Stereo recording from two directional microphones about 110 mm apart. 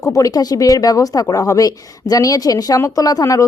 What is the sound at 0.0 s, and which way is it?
Speech, 30° left (ahead or behind).